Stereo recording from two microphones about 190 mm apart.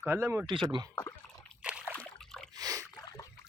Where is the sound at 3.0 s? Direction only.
15° left (ahead or behind).